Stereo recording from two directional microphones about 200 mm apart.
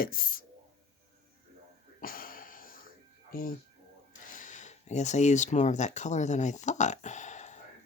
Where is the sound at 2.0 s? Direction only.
45° left (ahead or behind).